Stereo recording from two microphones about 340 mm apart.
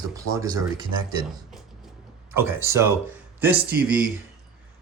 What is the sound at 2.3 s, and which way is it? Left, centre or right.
Speech, centre.